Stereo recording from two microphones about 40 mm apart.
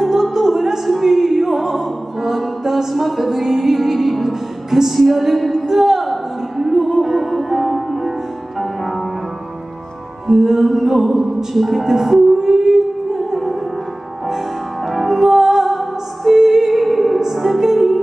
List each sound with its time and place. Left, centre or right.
0.0 s music: centre
5.7 s a sound: centre
6.6 s music: centre
10.2 s music: centre
14.9 s music: centre